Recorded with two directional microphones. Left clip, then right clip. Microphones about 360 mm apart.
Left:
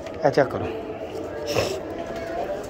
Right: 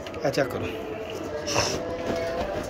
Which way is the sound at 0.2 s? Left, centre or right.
Centre.